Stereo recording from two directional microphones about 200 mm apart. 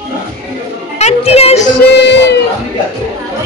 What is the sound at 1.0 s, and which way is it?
Speech, 30° left (ahead or behind).